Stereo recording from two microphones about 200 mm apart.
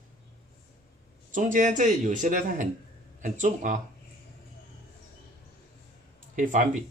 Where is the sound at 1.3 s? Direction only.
40° right (ahead or behind).